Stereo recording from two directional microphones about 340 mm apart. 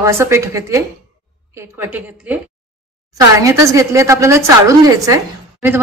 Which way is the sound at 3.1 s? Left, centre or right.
Centre.